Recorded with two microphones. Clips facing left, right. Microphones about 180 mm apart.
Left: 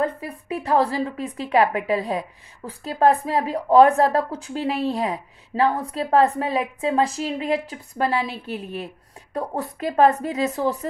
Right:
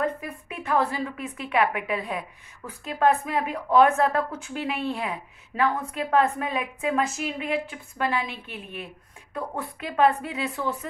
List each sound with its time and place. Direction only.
0.0 s a woman's voice: 35° left (ahead or behind)